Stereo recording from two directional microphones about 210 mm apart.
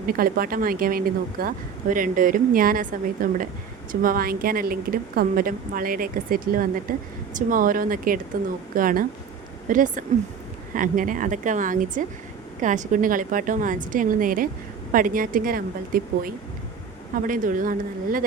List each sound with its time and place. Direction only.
0.1 s a woman's voice: 45° right (ahead or behind)